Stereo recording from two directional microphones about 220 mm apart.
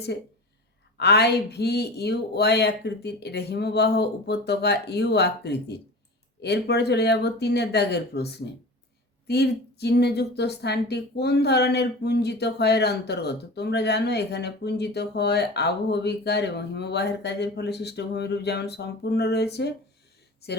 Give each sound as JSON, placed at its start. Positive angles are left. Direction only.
{"t": 0.9, "sound": "a woman's voice", "side_deg": 50}